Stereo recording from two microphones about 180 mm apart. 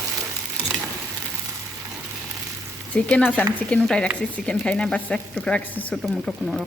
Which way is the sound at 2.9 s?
5° left (ahead or behind).